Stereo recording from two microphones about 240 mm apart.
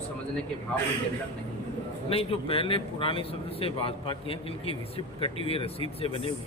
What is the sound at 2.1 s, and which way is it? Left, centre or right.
Speech, left.